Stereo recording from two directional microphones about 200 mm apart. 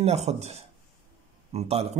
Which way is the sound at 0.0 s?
30° right (ahead or behind).